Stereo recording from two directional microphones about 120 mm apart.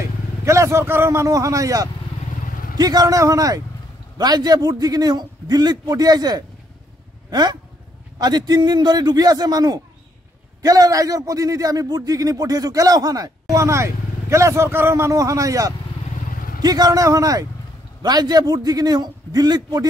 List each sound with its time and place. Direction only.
0.5 s a man's voice: 25° right (ahead or behind)